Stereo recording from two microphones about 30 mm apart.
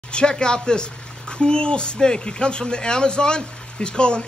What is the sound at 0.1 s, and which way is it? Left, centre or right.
Speech, left.